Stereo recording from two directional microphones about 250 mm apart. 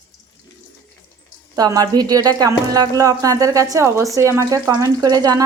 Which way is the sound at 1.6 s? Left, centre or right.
Centre.